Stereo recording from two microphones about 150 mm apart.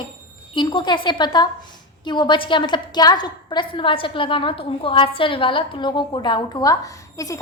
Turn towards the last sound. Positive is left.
turn(degrees=20)  # may be behind; listen again after turning